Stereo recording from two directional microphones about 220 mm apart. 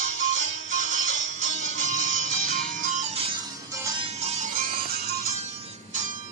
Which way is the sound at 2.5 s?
35° right (ahead or behind).